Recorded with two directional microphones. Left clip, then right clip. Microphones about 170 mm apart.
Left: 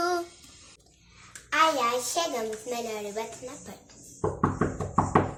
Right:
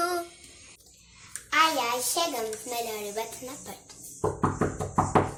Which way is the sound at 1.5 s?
15° left (ahead or behind).